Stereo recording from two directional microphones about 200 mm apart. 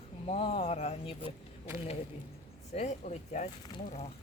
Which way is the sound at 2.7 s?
35° left (ahead or behind).